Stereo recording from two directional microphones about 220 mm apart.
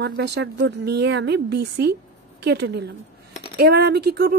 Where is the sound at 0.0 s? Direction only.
50° right (ahead or behind).